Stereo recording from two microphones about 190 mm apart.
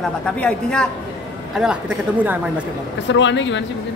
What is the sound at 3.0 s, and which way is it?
Speech, 75° left (ahead or behind).